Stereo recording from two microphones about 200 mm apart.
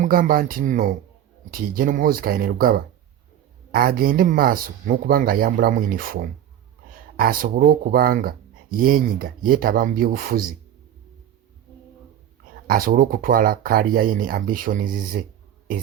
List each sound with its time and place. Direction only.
0.0 s speech: 45° right (ahead or behind)
7.2 s speech: 45° right (ahead or behind)
12.6 s speech: 45° right (ahead or behind)
15.7 s music: 45° right (ahead or behind)